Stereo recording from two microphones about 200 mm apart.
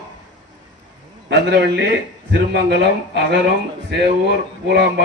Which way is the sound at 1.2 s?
55° right (ahead or behind).